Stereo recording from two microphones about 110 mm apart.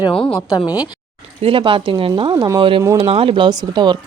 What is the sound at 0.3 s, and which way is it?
Speech, 35° left (ahead or behind).